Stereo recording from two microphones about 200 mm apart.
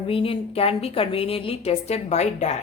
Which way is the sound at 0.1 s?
25° left (ahead or behind).